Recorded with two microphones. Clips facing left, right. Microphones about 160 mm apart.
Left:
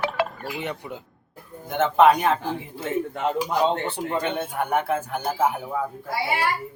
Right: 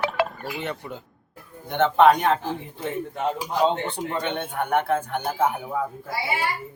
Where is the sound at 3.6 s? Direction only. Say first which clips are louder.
Even; 5° left (ahead or behind).